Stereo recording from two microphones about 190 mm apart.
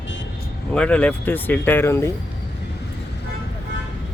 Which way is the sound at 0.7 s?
5° left (ahead or behind).